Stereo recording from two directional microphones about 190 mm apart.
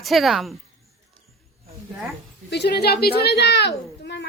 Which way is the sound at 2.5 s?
60° left (ahead or behind).